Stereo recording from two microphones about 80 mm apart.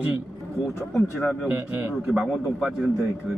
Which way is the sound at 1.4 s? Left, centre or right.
Centre.